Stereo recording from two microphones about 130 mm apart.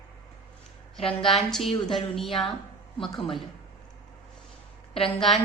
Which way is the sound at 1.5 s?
Centre (ahead or behind).